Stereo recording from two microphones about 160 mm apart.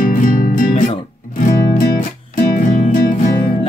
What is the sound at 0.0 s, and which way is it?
Music, 60° left (ahead or behind).